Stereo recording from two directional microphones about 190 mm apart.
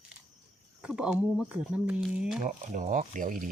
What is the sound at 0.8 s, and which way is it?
Speech, 5° right (ahead or behind).